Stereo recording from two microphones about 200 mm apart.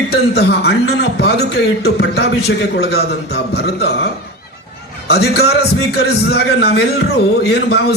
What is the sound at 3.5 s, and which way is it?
Speech, 55° left (ahead or behind).